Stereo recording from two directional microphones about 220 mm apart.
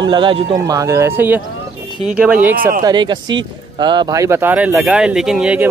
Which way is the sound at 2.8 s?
20° right (ahead or behind).